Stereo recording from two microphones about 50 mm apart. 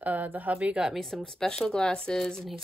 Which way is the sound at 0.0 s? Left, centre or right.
Right.